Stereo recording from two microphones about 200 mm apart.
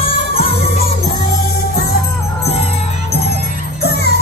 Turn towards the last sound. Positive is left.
turn(degrees=55)  # may be behind; listen again after turning